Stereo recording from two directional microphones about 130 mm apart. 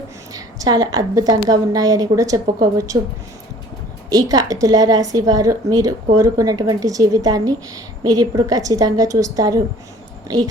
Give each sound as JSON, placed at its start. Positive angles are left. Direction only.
{"t": 0.3, "sound": "a woman's voice", "side_deg": -30}
{"t": 4.1, "sound": "a woman's voice", "side_deg": -30}